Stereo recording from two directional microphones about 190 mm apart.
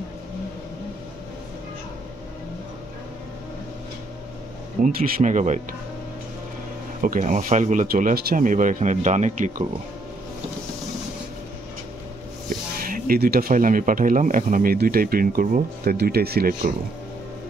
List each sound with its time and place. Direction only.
4.8 s speech: 50° right (ahead or behind)
7.0 s speech: 45° right (ahead or behind)
12.4 s speech: 45° right (ahead or behind)